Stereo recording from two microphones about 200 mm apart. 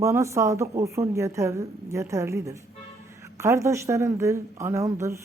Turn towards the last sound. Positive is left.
turn(degrees=-15)  # may be behind; listen again after turning